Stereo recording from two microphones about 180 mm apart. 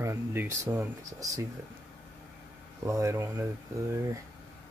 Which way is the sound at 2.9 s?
15° right (ahead or behind).